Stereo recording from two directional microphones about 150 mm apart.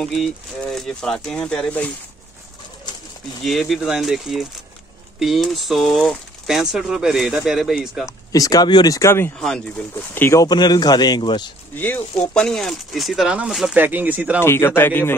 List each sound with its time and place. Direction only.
0.0 s speech: centre (ahead or behind)
3.4 s speech: centre (ahead or behind)
8.3 s speech: 25° left (ahead or behind)
9.4 s speech: 5° left (ahead or behind); by 11.5 s 30° left (ahead or behind)
11.7 s speech: 15° left (ahead or behind); by 14.4 s 10° right (ahead or behind)
14.4 s a man's voice: 15° left (ahead or behind)